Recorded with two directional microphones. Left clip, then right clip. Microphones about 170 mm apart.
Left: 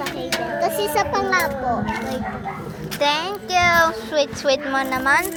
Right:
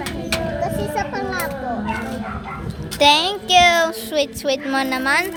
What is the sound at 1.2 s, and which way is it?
Children playing, 15° left (ahead or behind).